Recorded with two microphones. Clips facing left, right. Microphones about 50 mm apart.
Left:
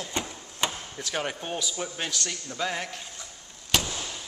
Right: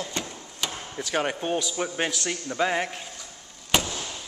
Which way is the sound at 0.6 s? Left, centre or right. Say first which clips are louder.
Left 3 dB; left.